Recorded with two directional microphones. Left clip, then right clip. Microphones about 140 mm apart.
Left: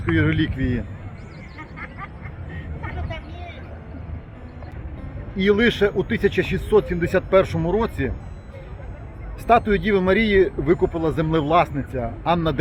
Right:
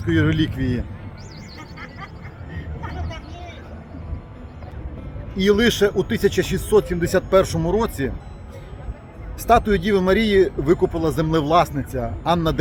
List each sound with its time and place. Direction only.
0.0 s speech: 20° right (ahead or behind)
2.8 s hubbub: 20° left (ahead or behind)
5.4 s speech: 15° right (ahead or behind)
9.5 s speech: 10° right (ahead or behind)